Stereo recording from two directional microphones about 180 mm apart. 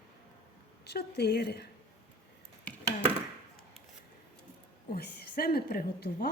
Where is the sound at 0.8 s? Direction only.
65° left (ahead or behind).